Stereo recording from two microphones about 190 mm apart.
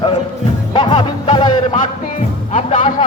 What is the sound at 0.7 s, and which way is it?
Music, 25° left (ahead or behind).